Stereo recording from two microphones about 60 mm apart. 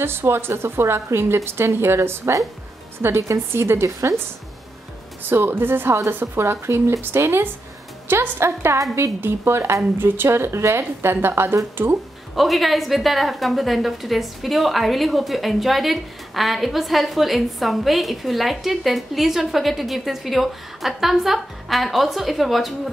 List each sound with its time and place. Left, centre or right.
0.0 s a woman's voice: right
5.3 s a woman's voice: right
9.9 s a woman's voice: right
12.4 s a woman's voice: centre